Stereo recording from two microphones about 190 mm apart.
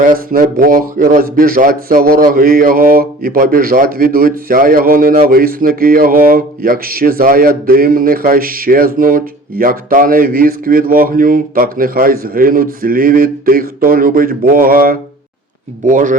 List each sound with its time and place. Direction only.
0.0 s speech: 45° right (ahead or behind)